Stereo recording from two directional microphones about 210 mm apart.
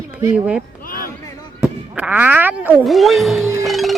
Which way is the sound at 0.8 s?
45° left (ahead or behind).